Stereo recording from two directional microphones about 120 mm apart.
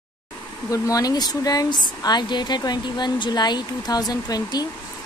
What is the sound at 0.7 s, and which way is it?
Speech, 30° left (ahead or behind).